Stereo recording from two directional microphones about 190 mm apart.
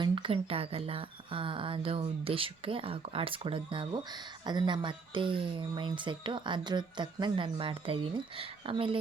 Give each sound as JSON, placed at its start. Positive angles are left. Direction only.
{"t": 0.0, "sound": "speech", "side_deg": -30}